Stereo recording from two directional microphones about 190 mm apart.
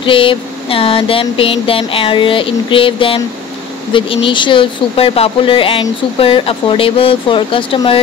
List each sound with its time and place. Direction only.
0.0 s speech: 25° left (ahead or behind)